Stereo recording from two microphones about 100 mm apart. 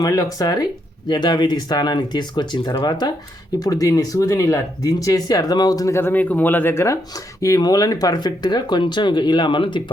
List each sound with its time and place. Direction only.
0.0 s speech: 35° left (ahead or behind)
6.0 s speech: 20° left (ahead or behind); by 9.8 s 55° left (ahead or behind)